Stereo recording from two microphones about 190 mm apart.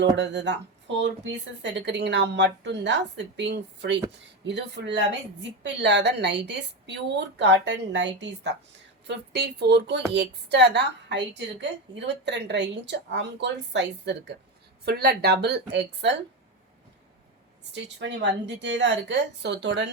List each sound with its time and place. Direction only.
0.2 s a woman's voice: 65° right (ahead or behind)
17.6 s a woman's voice: 70° right (ahead or behind)